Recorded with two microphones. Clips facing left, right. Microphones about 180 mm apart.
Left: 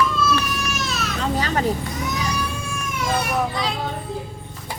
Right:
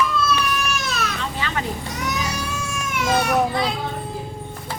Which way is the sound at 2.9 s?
75° right (ahead or behind).